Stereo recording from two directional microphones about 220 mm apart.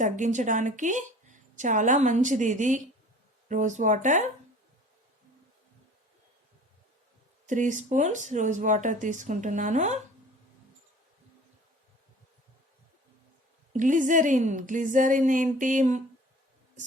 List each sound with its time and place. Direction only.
0.0 s a woman's voice: 35° right (ahead or behind)
7.4 s a woman's voice: 35° right (ahead or behind)
13.7 s a woman's voice: 35° right (ahead or behind)